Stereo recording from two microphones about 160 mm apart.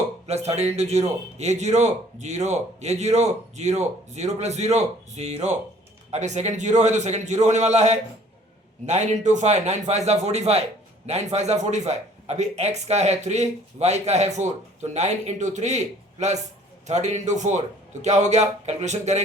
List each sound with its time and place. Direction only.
0.3 s a man's voice: 40° right (ahead or behind)